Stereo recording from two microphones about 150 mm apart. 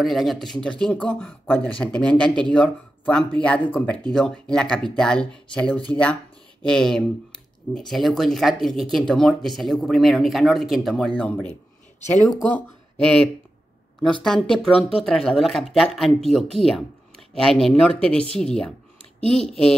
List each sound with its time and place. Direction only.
0.0 s speech: centre (ahead or behind)
14.2 s speech: centre (ahead or behind)